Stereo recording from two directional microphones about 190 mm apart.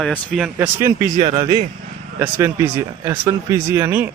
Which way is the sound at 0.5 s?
10° right (ahead or behind).